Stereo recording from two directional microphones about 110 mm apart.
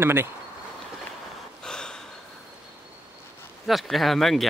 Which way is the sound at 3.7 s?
Centre (ahead or behind).